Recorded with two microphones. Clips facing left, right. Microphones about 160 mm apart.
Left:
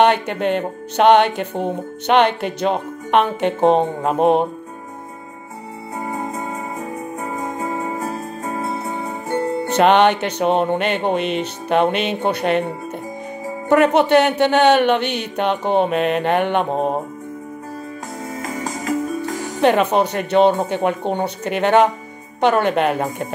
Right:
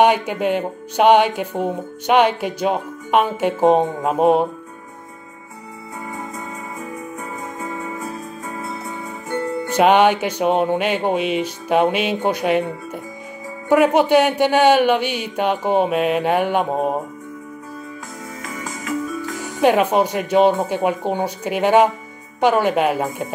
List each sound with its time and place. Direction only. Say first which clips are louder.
0.0 s speech: even; 10° right (ahead or behind)
6.0 s music: left 5 dB; 45° left (ahead or behind)
9.8 s speech: even; 10° right (ahead or behind)
13.7 s speech: even; 10° right (ahead or behind)
18.4 s music: left 4 dB; 35° left (ahead or behind)
19.6 s speech: even; 10° right (ahead or behind)